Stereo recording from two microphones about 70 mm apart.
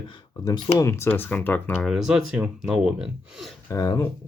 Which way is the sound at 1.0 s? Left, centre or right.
Left.